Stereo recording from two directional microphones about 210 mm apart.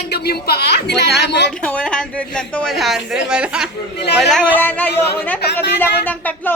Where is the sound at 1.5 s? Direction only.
5° left (ahead or behind).